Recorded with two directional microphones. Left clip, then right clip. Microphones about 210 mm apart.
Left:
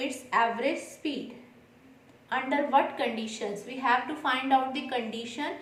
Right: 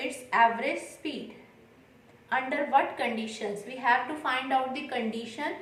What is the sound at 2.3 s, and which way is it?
A woman's voice, 10° left (ahead or behind).